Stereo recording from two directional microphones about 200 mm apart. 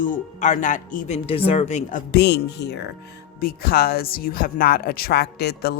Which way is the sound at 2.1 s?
60° left (ahead or behind).